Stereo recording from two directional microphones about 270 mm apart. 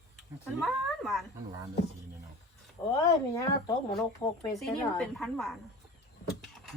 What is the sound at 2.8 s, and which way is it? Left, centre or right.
Speech, centre.